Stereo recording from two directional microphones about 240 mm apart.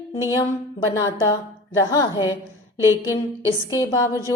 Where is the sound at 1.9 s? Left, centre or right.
Centre.